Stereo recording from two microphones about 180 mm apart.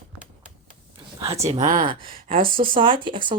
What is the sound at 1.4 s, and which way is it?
Speech, 40° right (ahead or behind).